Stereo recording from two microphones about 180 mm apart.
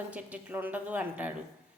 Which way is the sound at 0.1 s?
10° right (ahead or behind).